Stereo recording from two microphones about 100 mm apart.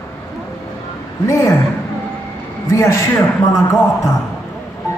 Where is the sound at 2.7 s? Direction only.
30° left (ahead or behind).